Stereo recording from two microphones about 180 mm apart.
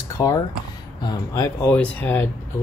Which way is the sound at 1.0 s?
20° left (ahead or behind).